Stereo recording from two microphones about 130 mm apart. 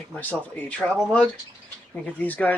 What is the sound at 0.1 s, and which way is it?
Speech, 15° left (ahead or behind).